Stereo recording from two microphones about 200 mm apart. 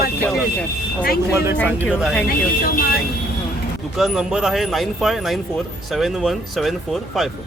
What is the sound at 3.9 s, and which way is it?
Speech, 5° right (ahead or behind).